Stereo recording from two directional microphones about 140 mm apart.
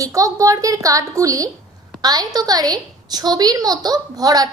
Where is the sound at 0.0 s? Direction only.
25° right (ahead or behind).